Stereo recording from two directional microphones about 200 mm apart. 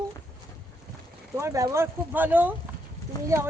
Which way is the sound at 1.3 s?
15° right (ahead or behind).